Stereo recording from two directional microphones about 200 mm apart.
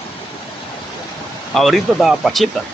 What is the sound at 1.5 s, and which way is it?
Speech, centre (ahead or behind).